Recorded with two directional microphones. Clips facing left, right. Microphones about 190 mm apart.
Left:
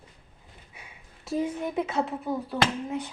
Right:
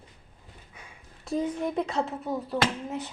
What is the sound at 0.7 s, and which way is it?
A child's voice, 5° left (ahead or behind).